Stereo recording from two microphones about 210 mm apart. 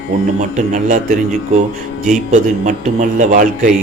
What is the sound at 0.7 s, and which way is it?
Speech, 35° right (ahead or behind).